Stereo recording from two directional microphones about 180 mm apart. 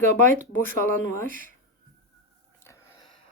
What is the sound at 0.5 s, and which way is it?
Speech, 10° left (ahead or behind).